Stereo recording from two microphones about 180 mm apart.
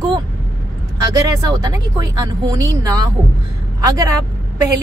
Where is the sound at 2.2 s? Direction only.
20° right (ahead or behind).